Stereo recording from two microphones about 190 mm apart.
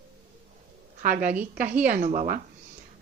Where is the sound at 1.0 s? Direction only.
45° right (ahead or behind).